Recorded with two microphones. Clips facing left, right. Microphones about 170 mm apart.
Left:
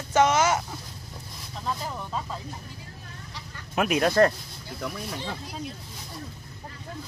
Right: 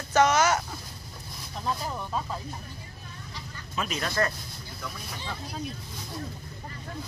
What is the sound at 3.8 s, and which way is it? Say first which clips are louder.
Speech: left 9 dB; 55° left (ahead or behind).